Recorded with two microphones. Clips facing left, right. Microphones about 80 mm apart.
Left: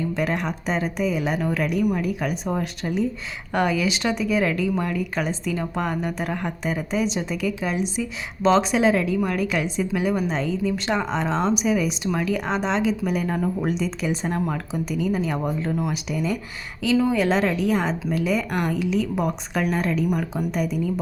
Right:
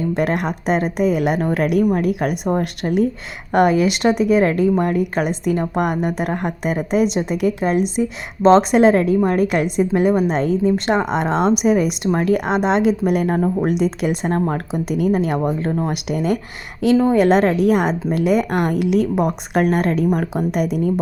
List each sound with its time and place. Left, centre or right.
0.2 s a woman's voice: right
16.8 s a woman's voice: right
20.5 s speech: right